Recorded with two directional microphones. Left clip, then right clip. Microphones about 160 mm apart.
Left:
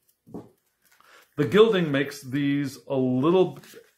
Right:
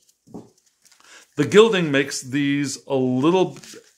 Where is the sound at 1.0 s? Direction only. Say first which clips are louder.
Right 3 dB; 35° right (ahead or behind).